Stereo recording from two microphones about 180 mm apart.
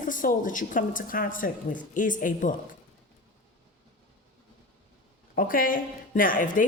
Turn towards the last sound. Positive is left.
turn(degrees=45)  # may be behind; listen again after turning